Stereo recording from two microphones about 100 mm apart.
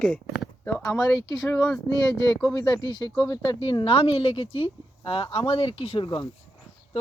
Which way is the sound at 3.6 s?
65° left (ahead or behind).